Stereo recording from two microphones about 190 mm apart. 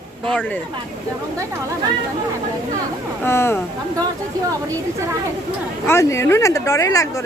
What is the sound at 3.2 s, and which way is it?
Speech, 15° left (ahead or behind).